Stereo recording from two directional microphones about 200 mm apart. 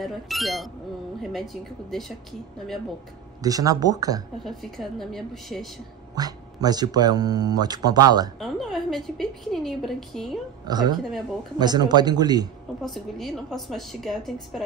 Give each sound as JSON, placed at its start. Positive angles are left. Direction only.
{"t": 0.0, "sound": "a woman's voice", "side_deg": 0}
{"t": 3.4, "sound": "speech", "side_deg": -20}
{"t": 4.5, "sound": "a woman's voice", "side_deg": 0}
{"t": 6.1, "sound": "speech", "side_deg": -20}
{"t": 8.4, "sound": "a woman's voice", "side_deg": 0}
{"t": 10.6, "sound": "a woman's voice", "side_deg": -20}
{"t": 11.1, "sound": "a woman's voice", "side_deg": 0}
{"t": 11.5, "sound": "speech", "side_deg": -20}
{"t": 12.8, "sound": "a woman's voice", "side_deg": 0}